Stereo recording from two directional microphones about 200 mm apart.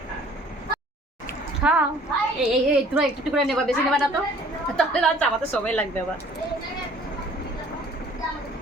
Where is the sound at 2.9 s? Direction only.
Centre (ahead or behind).